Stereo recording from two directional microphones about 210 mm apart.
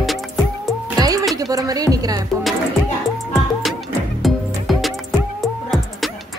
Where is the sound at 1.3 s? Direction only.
15° right (ahead or behind).